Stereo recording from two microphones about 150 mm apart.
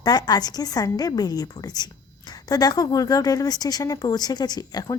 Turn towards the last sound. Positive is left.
turn(degrees=25)  # may be behind; listen again after turning